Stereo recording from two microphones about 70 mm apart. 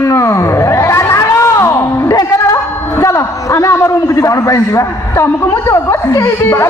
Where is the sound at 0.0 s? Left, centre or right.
Left.